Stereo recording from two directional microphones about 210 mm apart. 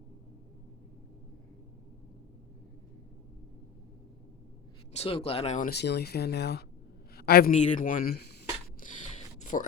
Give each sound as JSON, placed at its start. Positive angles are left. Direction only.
{"t": 4.9, "sound": "speech", "side_deg": 30}
{"t": 5.7, "sound": "a man's voice", "side_deg": 50}
{"t": 8.8, "sound": "a sound", "side_deg": 40}